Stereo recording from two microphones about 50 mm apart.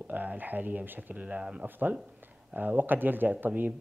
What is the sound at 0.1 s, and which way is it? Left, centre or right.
Speech, right.